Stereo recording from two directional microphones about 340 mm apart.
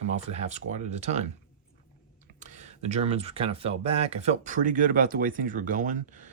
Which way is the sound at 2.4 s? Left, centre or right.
Right.